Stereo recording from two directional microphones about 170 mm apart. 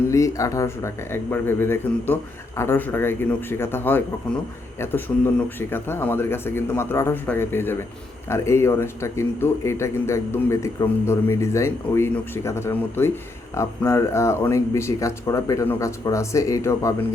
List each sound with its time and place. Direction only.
0.1 s speech: 20° left (ahead or behind)